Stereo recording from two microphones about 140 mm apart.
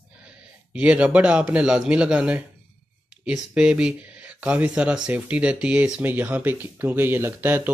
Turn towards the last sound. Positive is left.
turn(degrees=-15)  # may be behind; listen again after turning